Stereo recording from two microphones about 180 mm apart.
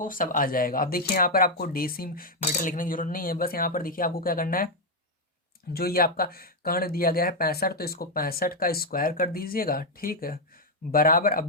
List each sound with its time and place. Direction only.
0.0 s speech: 50° left (ahead or behind)
5.7 s speech: 55° left (ahead or behind)